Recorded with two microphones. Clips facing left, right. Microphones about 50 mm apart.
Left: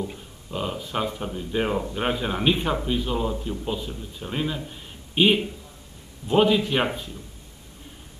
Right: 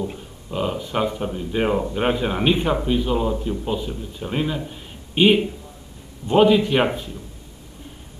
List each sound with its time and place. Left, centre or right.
0.0 s speech: centre